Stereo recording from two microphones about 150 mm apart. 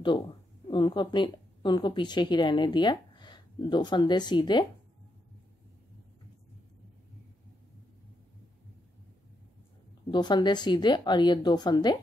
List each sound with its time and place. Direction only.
0.7 s a woman's voice: 30° left (ahead or behind)
10.1 s speech: 30° left (ahead or behind)